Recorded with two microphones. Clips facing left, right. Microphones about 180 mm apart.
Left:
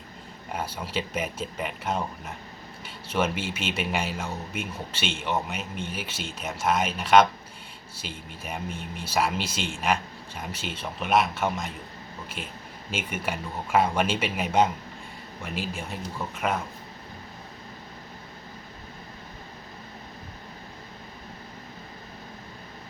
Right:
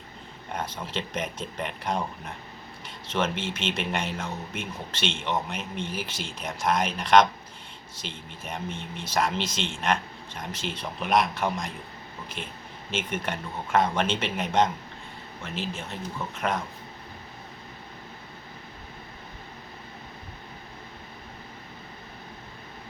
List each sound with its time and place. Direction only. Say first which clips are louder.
0.5 s a man's voice: left 1 dB; 10° left (ahead or behind)
12.9 s a man's voice: right 1 dB; 10° left (ahead or behind)